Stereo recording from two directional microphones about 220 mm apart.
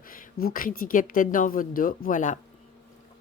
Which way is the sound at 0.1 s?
40° left (ahead or behind).